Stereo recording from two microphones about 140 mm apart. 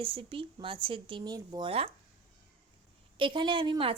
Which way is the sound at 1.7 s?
45° right (ahead or behind).